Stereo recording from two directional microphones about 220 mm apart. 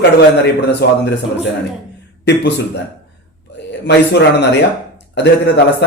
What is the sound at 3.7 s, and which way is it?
Speech, 50° left (ahead or behind).